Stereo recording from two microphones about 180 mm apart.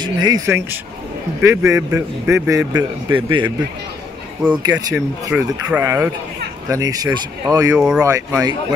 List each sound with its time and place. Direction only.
0.0 s speech: 25° right (ahead or behind)
4.6 s speech: 20° right (ahead or behind)
4.9 s speech: 10° right (ahead or behind)
7.7 s speech: 5° right (ahead or behind)
8.0 s speech: 20° right (ahead or behind)